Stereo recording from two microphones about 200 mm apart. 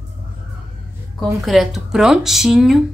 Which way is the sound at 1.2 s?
Centre (ahead or behind).